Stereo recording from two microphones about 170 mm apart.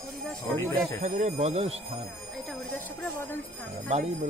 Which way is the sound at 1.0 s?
45° right (ahead or behind).